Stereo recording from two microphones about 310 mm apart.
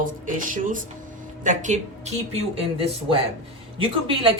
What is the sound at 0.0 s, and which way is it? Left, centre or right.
Speech, right.